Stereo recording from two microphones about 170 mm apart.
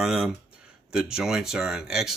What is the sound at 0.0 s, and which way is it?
Speech, centre (ahead or behind).